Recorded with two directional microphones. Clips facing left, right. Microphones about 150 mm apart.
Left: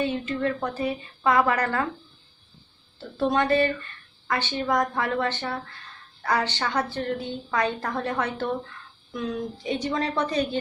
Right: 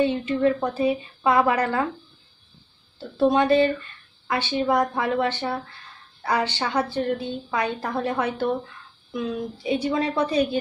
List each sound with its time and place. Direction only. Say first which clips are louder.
0.0 s a woman's voice: right 5 dB; 15° right (ahead or behind)
3.2 s a woman's voice: right 4 dB; 15° right (ahead or behind)